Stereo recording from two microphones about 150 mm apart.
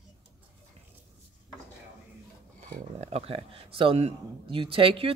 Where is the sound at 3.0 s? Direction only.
45° right (ahead or behind).